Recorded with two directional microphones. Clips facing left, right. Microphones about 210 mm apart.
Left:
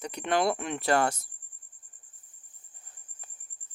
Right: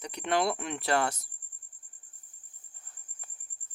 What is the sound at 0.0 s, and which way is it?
Speech, 50° left (ahead or behind).